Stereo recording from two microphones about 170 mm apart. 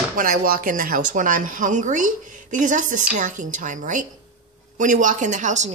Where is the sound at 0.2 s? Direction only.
60° right (ahead or behind).